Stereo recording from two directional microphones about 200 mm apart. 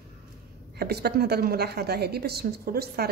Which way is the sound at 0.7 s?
50° right (ahead or behind).